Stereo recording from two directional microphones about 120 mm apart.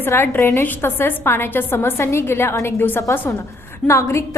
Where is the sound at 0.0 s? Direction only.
20° left (ahead or behind).